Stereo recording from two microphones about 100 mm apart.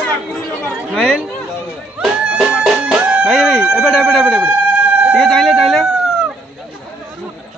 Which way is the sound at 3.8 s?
5° left (ahead or behind).